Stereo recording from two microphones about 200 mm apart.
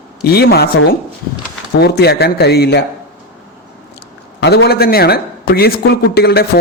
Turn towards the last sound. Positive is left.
turn(degrees=55)  # may be behind; listen again after turning